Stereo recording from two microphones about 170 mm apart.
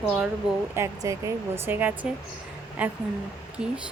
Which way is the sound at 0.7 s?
15° right (ahead or behind).